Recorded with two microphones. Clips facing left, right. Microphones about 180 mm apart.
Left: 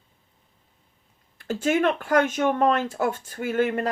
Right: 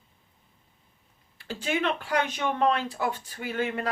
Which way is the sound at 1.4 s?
45° left (ahead or behind).